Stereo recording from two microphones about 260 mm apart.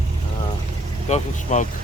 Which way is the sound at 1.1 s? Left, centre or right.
Left.